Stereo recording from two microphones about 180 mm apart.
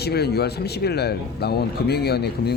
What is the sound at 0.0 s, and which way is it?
A man's voice, 65° left (ahead or behind).